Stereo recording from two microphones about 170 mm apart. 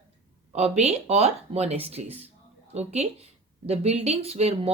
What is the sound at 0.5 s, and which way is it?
A woman's voice, 40° right (ahead or behind).